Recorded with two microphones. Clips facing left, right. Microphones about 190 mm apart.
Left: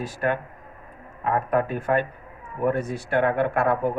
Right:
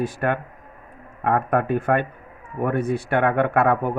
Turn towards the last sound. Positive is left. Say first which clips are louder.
# right 3 dB
turn(degrees=-60)  # may be behind; listen again after turning